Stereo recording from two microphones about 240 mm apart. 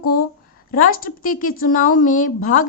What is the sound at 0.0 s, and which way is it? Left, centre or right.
Speech, left.